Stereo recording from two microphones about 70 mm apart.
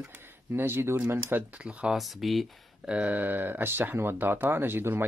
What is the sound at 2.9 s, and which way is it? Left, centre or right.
Speech, right.